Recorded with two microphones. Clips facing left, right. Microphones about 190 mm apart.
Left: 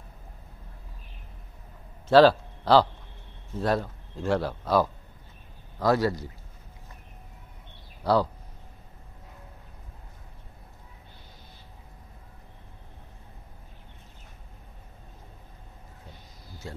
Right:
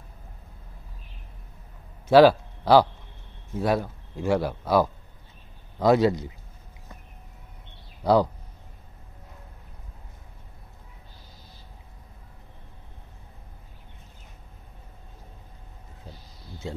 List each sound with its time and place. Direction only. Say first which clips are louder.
2.0 s a man's voice: right 2 dB; 10° right (ahead or behind)
8.0 s speech: right 3 dB; 15° right (ahead or behind)